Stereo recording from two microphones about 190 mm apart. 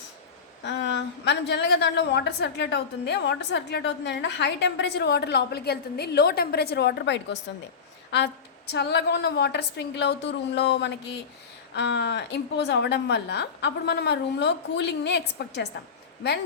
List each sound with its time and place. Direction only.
0.6 s a woman's voice: 70° left (ahead or behind)